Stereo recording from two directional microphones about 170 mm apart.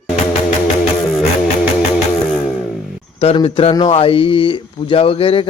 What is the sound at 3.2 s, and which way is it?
Speech, 35° left (ahead or behind).